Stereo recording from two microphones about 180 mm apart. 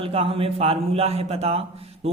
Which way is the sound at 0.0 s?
30° right (ahead or behind).